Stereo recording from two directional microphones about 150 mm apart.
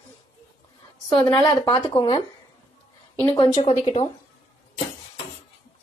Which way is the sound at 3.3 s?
40° left (ahead or behind).